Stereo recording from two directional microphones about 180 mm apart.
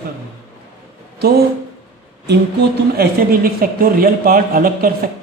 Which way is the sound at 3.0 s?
55° right (ahead or behind).